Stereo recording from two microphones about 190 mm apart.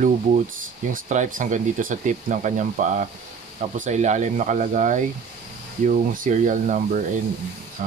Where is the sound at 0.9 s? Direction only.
40° right (ahead or behind).